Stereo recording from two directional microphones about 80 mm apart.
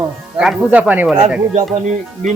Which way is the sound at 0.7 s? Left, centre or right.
Centre.